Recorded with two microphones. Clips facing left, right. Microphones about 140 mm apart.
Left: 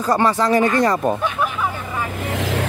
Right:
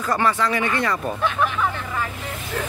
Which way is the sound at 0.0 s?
35° left (ahead or behind).